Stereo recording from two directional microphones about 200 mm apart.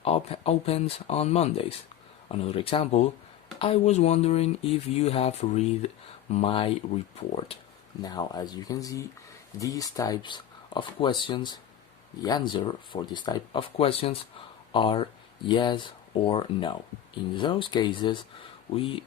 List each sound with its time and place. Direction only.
0.0 s speech: 30° left (ahead or behind)